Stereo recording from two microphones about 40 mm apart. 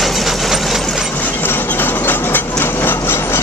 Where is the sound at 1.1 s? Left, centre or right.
Left.